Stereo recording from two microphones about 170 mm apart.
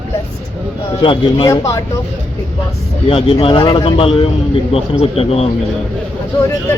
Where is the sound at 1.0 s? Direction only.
30° left (ahead or behind).